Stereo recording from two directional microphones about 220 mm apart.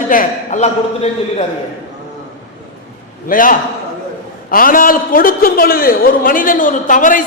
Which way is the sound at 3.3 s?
40° left (ahead or behind).